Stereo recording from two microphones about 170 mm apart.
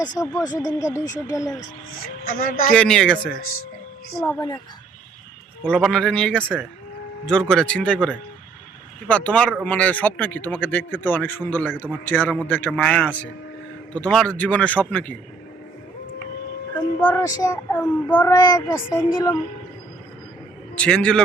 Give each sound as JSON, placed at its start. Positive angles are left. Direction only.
{"t": 0.1, "sound": "speech", "side_deg": 20}
{"t": 2.2, "sound": "speech", "side_deg": 55}
{"t": 2.7, "sound": "speech", "side_deg": 5}
{"t": 4.4, "sound": "speech", "side_deg": 25}
{"t": 5.6, "sound": "speech", "side_deg": 5}
{"t": 9.0, "sound": "speech", "side_deg": 10}
{"t": 17.0, "sound": "speech", "side_deg": 15}
{"t": 18.3, "sound": "speech", "side_deg": 20}
{"t": 20.7, "sound": "speech", "side_deg": 5}